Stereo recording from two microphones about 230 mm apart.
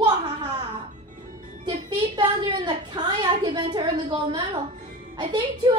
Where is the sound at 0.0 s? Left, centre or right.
Centre.